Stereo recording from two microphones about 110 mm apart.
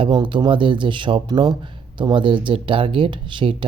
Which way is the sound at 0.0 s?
45° right (ahead or behind).